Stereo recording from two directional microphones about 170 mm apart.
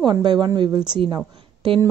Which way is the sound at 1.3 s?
30° right (ahead or behind).